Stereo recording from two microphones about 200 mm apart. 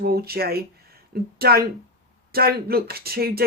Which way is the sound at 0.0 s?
50° right (ahead or behind).